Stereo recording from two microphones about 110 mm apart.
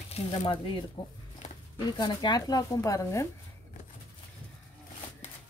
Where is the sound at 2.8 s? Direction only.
25° left (ahead or behind).